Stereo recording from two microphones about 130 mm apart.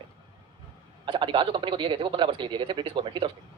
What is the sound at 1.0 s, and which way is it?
A man's voice, 40° right (ahead or behind).